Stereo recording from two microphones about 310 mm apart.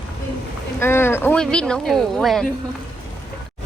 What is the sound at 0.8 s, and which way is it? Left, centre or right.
Speech, centre.